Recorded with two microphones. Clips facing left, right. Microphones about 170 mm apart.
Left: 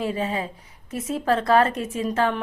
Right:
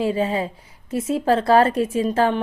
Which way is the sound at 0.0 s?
30° right (ahead or behind).